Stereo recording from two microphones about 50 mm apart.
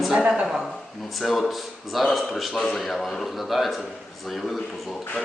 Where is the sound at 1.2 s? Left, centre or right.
Centre.